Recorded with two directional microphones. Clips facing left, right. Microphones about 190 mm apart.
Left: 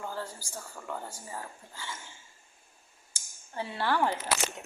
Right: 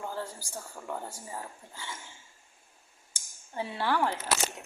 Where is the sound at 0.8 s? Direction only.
15° right (ahead or behind).